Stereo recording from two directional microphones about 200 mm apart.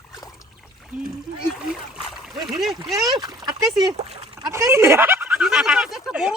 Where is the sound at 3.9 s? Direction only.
30° right (ahead or behind).